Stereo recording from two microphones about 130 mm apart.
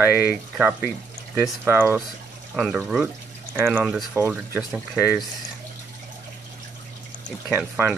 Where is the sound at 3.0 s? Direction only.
15° right (ahead or behind).